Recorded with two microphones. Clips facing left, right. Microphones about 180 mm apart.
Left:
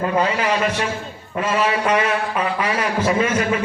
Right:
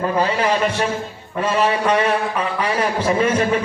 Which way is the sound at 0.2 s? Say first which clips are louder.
Right 2 dB; 30° right (ahead or behind).